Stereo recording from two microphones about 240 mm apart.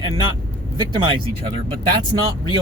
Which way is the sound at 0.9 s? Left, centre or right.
Right.